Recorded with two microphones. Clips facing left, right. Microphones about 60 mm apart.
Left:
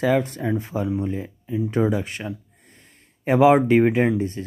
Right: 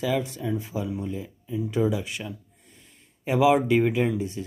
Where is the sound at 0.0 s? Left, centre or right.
Left.